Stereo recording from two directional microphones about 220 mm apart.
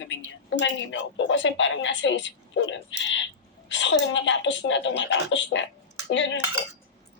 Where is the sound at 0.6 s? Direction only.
55° left (ahead or behind).